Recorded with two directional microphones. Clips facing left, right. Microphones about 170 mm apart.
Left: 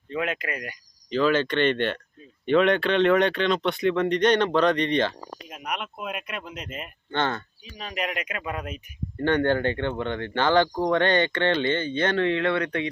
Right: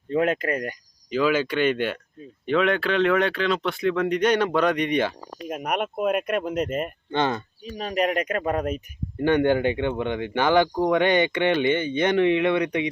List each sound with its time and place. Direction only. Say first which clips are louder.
0.1 s speech: right 7 dB; 45° right (ahead or behind)
1.1 s speech: even; 10° right (ahead or behind)
5.5 s speech: right 8 dB; 50° right (ahead or behind)
7.1 s speech: right 2 dB; 15° right (ahead or behind)
7.6 s speech: right 10 dB; 45° right (ahead or behind)
9.1 s speech: right 3 dB; 10° right (ahead or behind)